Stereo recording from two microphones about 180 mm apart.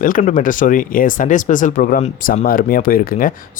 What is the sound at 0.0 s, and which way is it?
Speech, 45° left (ahead or behind).